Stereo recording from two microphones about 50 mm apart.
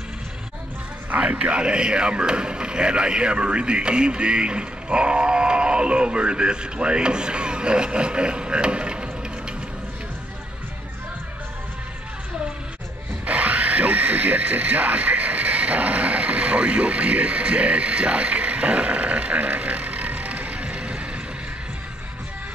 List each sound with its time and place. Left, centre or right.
1.1 s speech: right
13.2 s music: right